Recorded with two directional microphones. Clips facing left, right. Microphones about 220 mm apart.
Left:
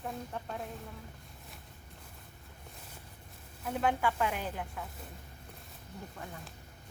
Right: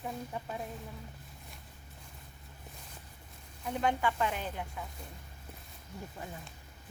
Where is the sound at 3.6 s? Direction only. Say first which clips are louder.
Even; 5° left (ahead or behind).